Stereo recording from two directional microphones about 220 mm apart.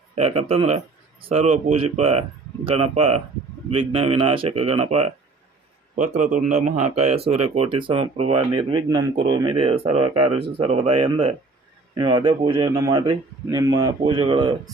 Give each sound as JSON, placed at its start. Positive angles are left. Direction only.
{"t": 0.2, "sound": "a man's voice", "side_deg": -25}
{"t": 6.7, "sound": "speech", "side_deg": -90}
{"t": 6.9, "sound": "speech", "side_deg": -30}